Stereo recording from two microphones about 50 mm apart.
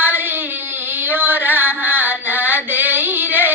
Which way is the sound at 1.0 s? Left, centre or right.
Right.